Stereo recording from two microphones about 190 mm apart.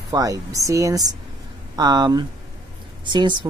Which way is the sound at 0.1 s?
20° right (ahead or behind).